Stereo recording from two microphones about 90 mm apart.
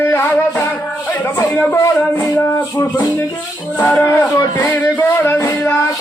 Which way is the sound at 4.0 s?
25° left (ahead or behind).